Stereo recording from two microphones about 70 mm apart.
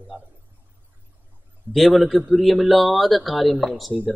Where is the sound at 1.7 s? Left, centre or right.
Right.